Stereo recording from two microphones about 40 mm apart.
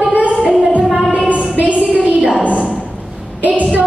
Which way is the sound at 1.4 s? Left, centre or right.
Right.